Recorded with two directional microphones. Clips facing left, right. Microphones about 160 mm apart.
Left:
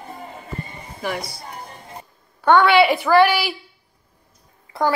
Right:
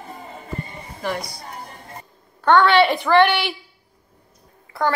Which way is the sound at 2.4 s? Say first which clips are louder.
Left 1 dB; 10° left (ahead or behind).